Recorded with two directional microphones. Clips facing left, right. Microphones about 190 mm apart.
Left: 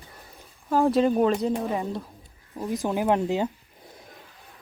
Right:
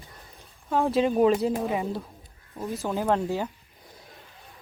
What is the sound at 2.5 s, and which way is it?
Speech, 15° left (ahead or behind).